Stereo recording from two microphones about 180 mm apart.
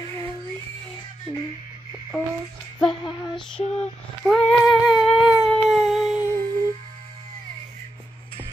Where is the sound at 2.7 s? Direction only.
Centre (ahead or behind).